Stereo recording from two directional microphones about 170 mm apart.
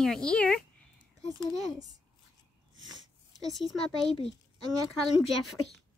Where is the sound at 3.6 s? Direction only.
Centre (ahead or behind).